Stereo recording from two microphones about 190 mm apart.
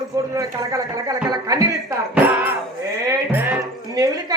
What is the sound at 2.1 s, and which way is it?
Music, 10° right (ahead or behind).